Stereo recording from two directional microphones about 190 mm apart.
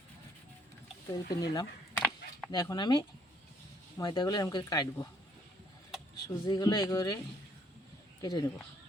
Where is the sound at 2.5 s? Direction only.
20° left (ahead or behind).